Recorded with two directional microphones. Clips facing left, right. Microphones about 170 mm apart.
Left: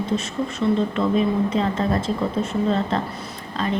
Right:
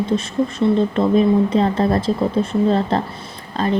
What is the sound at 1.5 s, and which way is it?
Speech, 35° right (ahead or behind).